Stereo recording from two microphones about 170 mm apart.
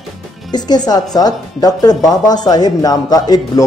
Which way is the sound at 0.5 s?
25° left (ahead or behind).